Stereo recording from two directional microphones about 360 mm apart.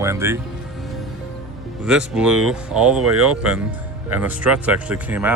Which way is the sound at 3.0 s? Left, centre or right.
Right.